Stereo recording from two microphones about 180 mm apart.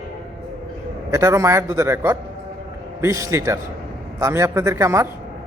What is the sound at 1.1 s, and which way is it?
Speech, 15° right (ahead or behind).